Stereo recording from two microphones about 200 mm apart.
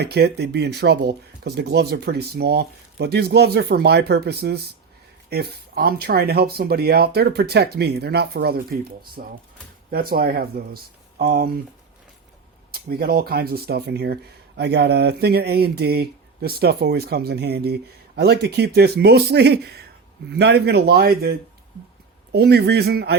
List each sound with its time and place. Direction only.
0.0 s speech: 55° right (ahead or behind)
12.7 s speech: 50° right (ahead or behind)